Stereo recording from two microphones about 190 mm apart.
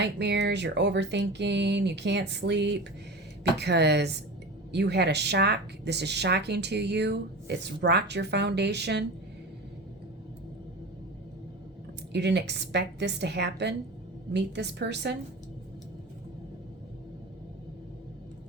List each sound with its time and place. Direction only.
0.0 s speech: 65° right (ahead or behind)
12.1 s speech: 60° right (ahead or behind)